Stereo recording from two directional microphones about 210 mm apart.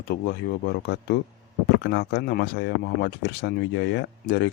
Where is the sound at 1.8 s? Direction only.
50° left (ahead or behind).